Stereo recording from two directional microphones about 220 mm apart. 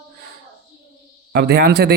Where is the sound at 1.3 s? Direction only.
45° right (ahead or behind).